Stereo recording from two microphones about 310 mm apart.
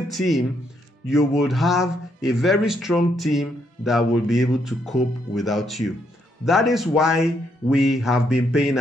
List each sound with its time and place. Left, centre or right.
0.1 s speech: centre